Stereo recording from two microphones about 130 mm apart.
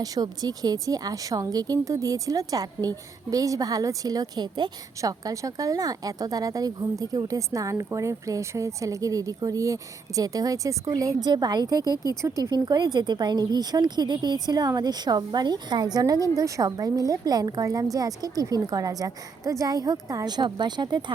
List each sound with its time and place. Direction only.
0.0 s speech: 30° right (ahead or behind)